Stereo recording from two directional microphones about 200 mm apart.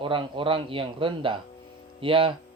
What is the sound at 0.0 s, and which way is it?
Speech, 25° right (ahead or behind).